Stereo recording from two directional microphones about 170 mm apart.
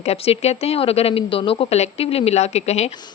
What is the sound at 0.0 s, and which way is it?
A woman's voice, 35° left (ahead or behind).